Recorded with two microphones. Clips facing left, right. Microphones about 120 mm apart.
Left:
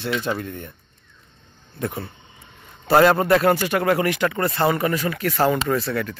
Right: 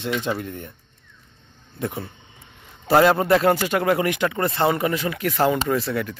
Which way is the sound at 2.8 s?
10° right (ahead or behind).